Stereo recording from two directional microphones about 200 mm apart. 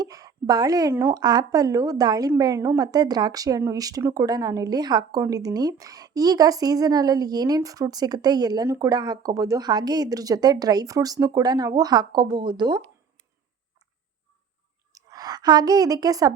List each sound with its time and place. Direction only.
0.0 s a woman's voice: 20° right (ahead or behind)
14.9 s a woman's voice: 20° right (ahead or behind)